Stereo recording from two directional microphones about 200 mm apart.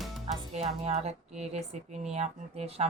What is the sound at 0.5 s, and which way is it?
Speech, 35° right (ahead or behind).